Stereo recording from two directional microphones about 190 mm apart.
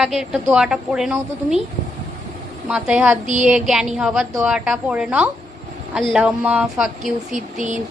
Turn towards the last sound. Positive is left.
turn(degrees=-40)  # may be behind; listen again after turning